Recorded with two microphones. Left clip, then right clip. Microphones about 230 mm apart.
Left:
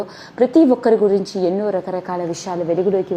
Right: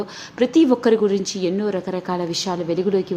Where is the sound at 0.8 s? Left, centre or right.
Centre.